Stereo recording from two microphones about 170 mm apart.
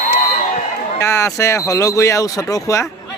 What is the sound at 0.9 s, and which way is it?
Speech, 15° left (ahead or behind).